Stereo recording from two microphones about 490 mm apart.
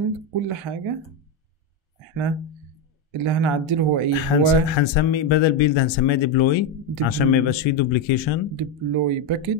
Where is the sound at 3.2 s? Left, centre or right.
Right.